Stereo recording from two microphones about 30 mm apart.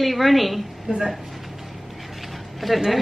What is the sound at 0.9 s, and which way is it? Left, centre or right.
Speech, right.